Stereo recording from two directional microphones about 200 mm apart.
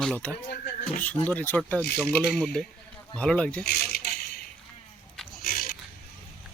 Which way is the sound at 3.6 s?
50° left (ahead or behind).